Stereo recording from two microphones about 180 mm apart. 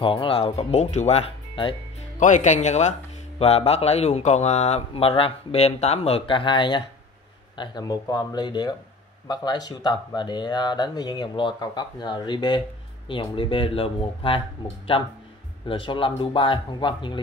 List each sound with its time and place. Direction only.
0.0 s speech: 30° left (ahead or behind)
2.1 s speech: 45° left (ahead or behind); by 17.2 s 25° left (ahead or behind)